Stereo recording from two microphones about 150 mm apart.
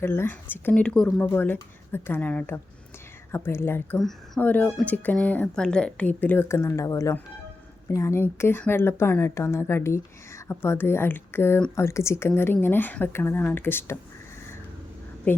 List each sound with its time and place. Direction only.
0.0 s speech: 15° left (ahead or behind)